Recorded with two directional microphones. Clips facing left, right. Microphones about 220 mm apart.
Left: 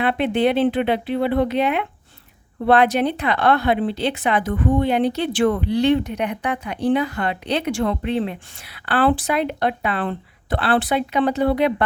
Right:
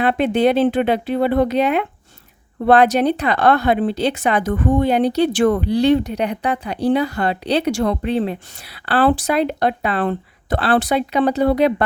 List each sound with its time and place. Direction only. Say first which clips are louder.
0.0 s speech: right 3 dB; 40° right (ahead or behind)